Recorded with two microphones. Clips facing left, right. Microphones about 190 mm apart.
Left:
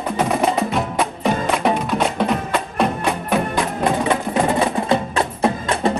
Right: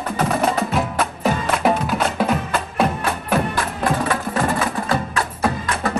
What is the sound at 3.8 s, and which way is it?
Music, 20° left (ahead or behind).